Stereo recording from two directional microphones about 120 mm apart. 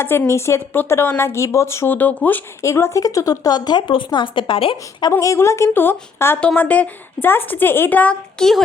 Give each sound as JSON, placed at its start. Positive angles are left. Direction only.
{"t": 0.0, "sound": "a woman's voice", "side_deg": 20}
{"t": 5.2, "sound": "a woman's voice", "side_deg": 25}